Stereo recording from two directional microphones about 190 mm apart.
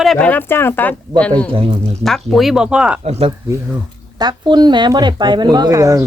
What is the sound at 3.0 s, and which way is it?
Speech, 30° right (ahead or behind).